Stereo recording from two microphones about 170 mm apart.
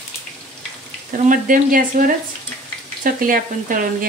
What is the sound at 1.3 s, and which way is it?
Speech, 50° right (ahead or behind).